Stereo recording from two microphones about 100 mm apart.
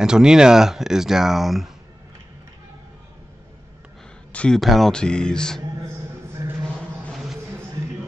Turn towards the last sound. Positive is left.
turn(degrees=0)  # may be behind; listen again after turning